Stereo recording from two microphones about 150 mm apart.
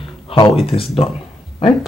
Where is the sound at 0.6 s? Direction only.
40° left (ahead or behind).